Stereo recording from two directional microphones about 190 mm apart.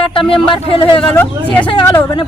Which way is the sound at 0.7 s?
25° left (ahead or behind).